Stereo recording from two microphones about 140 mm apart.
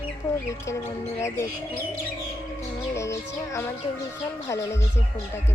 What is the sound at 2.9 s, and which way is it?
Music, 20° left (ahead or behind).